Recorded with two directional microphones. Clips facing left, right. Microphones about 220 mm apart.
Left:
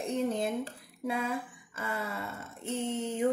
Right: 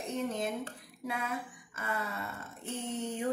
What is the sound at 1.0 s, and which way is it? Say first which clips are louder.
A woman's voice: left 4 dB; 25° left (ahead or behind).